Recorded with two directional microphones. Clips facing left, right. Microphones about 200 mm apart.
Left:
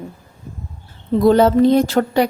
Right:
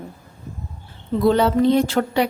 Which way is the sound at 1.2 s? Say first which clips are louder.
Left 4 dB; 45° left (ahead or behind).